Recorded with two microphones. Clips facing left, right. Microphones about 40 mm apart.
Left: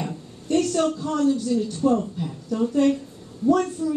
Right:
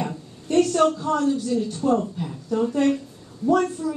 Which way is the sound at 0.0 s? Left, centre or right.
Centre.